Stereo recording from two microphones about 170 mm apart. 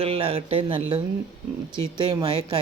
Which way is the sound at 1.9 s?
25° right (ahead or behind).